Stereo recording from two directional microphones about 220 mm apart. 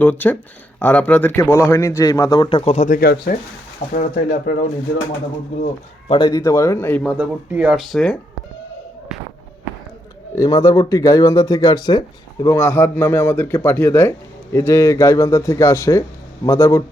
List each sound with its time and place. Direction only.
0.0 s a man's voice: 10° left (ahead or behind); by 4.5 s 40° left (ahead or behind)
6.1 s speech: 20° left (ahead or behind)
7.0 s speech: 5° right (ahead or behind)
10.3 s speech: 15° left (ahead or behind)